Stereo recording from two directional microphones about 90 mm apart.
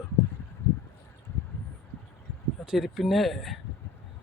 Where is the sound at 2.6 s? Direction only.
5° right (ahead or behind).